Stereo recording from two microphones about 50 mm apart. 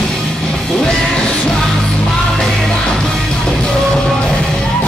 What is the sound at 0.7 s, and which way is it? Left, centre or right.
Music, centre.